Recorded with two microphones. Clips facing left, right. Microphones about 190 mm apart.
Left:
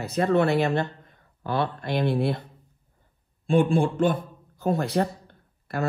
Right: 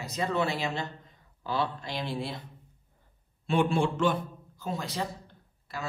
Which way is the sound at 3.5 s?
50° left (ahead or behind).